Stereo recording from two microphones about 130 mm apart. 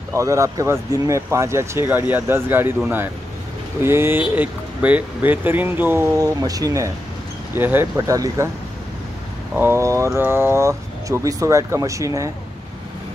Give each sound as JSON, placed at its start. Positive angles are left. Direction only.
{"t": 0.1, "sound": "speech", "side_deg": -25}
{"t": 6.1, "sound": "speech", "side_deg": -30}
{"t": 9.6, "sound": "speech", "side_deg": -20}